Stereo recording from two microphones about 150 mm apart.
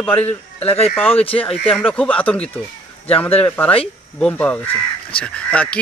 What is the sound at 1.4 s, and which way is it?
Speech, 5° left (ahead or behind).